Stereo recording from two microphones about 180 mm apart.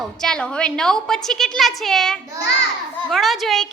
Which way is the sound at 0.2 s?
5° left (ahead or behind).